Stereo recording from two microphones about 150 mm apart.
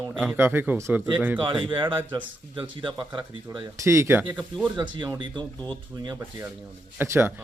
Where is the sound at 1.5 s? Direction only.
35° right (ahead or behind).